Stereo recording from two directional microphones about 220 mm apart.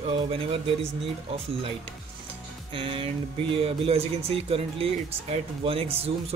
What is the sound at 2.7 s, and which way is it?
Speech, 25° right (ahead or behind).